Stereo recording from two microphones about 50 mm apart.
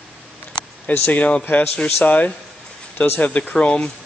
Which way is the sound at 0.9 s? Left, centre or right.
Left.